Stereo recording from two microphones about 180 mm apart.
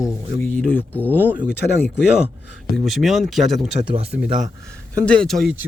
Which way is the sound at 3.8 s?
30° right (ahead or behind).